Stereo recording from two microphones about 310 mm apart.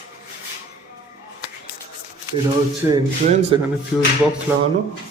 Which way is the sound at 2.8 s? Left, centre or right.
Centre.